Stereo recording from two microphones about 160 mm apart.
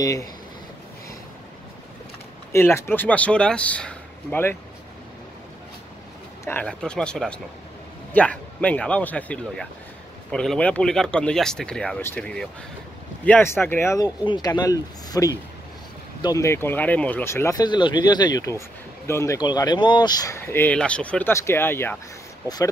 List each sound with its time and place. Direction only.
0.0 s speech: 20° left (ahead or behind)
2.5 s speech: 15° left (ahead or behind)
6.4 s speech: 10° left (ahead or behind)